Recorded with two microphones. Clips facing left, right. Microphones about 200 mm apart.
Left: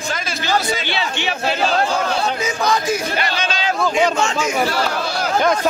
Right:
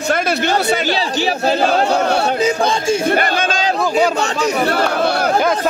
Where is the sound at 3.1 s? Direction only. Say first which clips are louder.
Right 6 dB; 50° right (ahead or behind).